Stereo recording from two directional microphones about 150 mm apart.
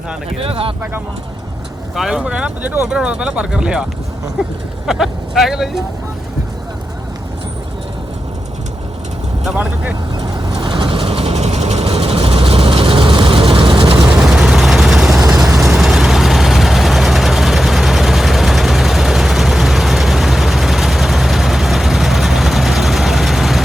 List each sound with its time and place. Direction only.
0.3 s speech: 40° right (ahead or behind)
2.0 s speech: 5° right (ahead or behind)
4.9 s speech: 5° right (ahead or behind)
9.5 s speech: 10° right (ahead or behind)
10.6 s vehicle: 35° right (ahead or behind)
13.9 s vehicle: 5° right (ahead or behind)